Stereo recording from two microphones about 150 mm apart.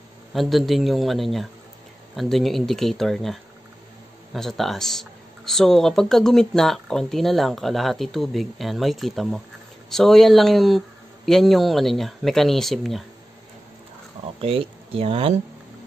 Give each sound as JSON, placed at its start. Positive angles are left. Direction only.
{"t": 0.3, "sound": "speech", "side_deg": 0}
{"t": 14.4, "sound": "speech", "side_deg": -40}